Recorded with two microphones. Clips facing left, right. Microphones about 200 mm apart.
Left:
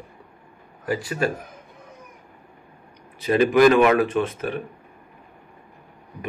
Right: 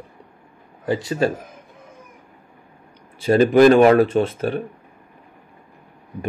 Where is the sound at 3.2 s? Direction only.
30° right (ahead or behind).